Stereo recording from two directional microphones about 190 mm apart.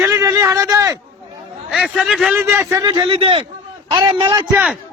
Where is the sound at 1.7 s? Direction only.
5° right (ahead or behind); by 4.6 s 20° right (ahead or behind).